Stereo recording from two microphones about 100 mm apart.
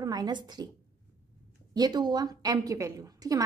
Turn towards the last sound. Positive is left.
turn(degrees=-35)  # may be behind; listen again after turning